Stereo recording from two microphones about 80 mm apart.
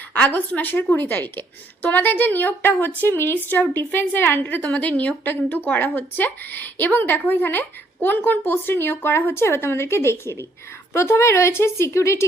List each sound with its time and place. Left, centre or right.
0.1 s a woman's voice: left